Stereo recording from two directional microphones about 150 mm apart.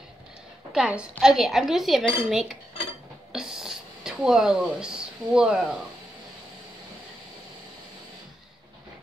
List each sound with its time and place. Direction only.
0.7 s a woman's voice: 5° right (ahead or behind)